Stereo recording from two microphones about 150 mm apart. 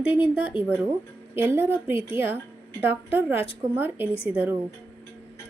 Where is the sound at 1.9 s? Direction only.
40° left (ahead or behind).